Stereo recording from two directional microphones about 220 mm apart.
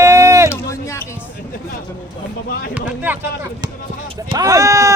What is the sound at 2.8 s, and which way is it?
Speech, 10° right (ahead or behind).